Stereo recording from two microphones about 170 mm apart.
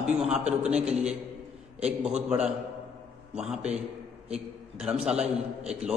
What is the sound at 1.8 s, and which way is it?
Speech, 40° right (ahead or behind).